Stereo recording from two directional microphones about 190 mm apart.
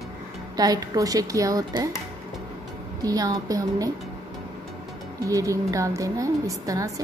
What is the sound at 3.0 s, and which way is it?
Speech, 20° right (ahead or behind).